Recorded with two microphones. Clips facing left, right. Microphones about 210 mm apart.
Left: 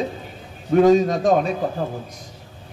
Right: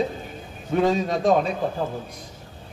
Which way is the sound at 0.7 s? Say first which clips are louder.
Left 7 dB; 45° left (ahead or behind).